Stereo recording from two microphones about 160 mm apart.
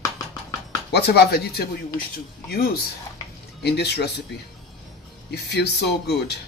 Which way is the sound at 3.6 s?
90° left.